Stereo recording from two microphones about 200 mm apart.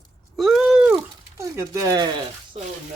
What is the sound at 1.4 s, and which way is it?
Speech, 15° right (ahead or behind).